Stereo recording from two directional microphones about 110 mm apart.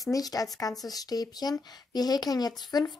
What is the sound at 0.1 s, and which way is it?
A woman's voice, 35° left (ahead or behind).